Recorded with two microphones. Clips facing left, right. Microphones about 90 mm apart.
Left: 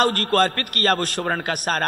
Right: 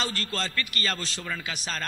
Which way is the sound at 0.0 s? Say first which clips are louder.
Left 13 dB; 55° left (ahead or behind).